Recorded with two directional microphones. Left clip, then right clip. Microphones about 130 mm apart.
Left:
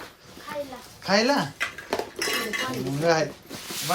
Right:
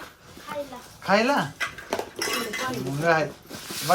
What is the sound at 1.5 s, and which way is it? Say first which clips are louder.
Dishes: even; centre (ahead or behind).